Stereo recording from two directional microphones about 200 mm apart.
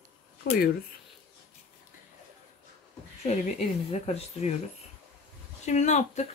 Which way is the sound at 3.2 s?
30° left (ahead or behind).